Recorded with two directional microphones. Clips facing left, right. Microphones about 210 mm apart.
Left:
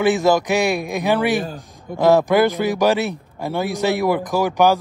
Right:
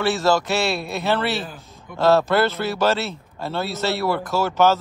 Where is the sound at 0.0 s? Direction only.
15° left (ahead or behind).